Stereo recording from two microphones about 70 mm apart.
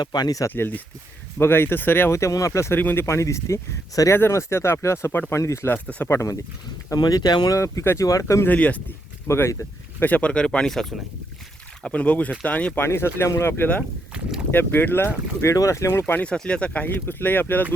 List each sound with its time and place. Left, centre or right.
0.0 s speech: left
0.5 s speech: left
2.1 s speech: left
2.7 s speech: left
4.1 s speech: left
6.9 s speech: left
7.5 s speech: left
8.4 s speech: left
9.2 s speech: left
10.0 s speech: left; by 10.9 s centre
11.8 s speech: centre
12.8 s speech: left
15.5 s speech: left
16.2 s speech: centre